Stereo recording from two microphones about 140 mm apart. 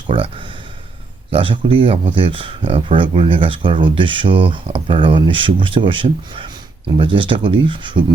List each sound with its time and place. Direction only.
0.1 s speech: 35° right (ahead or behind)